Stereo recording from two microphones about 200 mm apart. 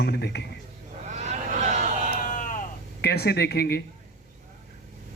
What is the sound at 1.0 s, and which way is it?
Vehicle, 35° right (ahead or behind).